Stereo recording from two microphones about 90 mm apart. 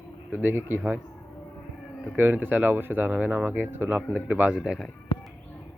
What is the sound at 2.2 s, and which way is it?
Speech, 20° right (ahead or behind).